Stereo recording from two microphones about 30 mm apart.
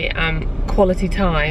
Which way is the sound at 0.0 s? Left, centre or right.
Centre.